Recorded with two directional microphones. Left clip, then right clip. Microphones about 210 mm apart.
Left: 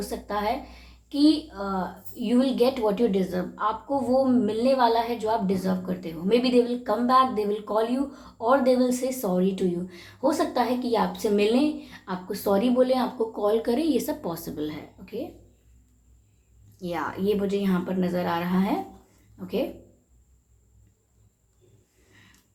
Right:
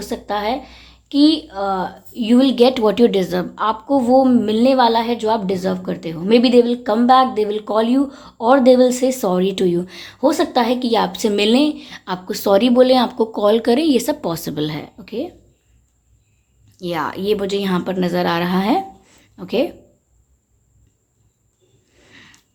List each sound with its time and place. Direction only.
0.0 s speech: 50° right (ahead or behind)
16.8 s speech: 45° right (ahead or behind)
22.1 s a sound: 50° right (ahead or behind)